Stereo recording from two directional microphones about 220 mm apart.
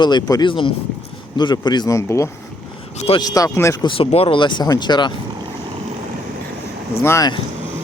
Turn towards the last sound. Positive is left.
turn(degrees=15)  # may be behind; listen again after turning